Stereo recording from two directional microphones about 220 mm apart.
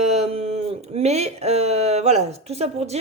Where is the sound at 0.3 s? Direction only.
25° right (ahead or behind).